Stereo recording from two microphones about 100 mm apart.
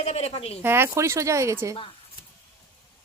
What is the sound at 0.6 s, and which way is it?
Speech, 25° right (ahead or behind).